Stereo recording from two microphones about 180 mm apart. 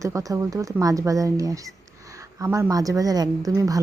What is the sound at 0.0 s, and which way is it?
Speech, 20° right (ahead or behind).